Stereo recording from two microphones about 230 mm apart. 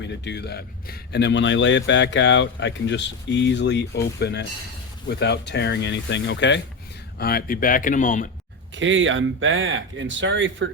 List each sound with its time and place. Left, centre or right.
0.0 s speech: left
8.7 s speech: right